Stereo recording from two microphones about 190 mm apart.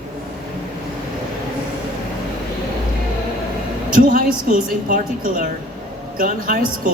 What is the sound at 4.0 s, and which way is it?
Speech, 45° right (ahead or behind).